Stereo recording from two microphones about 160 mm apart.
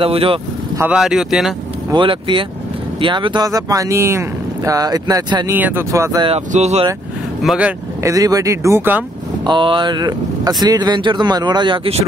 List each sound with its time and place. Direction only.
0.0 s speech: 35° right (ahead or behind)
0.7 s speech: 5° right (ahead or behind)
1.9 s speech: 30° right (ahead or behind)
5.5 s speech: 10° right (ahead or behind)
6.5 s speech: 45° right (ahead or behind)
7.4 s speech: 10° right (ahead or behind)
8.0 s speech: 20° right (ahead or behind)
9.5 s speech: 30° right (ahead or behind)